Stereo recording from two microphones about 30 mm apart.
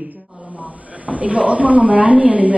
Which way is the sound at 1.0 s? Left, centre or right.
Right.